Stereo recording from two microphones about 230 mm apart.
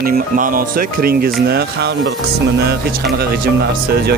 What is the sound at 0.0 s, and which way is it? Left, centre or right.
Speech, right.